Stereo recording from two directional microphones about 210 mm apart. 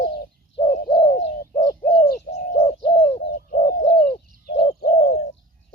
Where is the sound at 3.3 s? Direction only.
45° left (ahead or behind).